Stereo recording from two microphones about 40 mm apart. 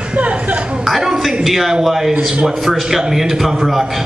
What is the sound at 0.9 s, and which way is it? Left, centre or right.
A man's voice, centre.